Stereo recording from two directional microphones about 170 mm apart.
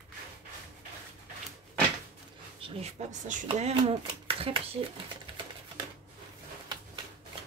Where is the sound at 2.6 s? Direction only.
40° right (ahead or behind).